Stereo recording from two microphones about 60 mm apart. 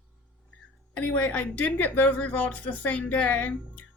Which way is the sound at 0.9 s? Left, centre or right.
Left.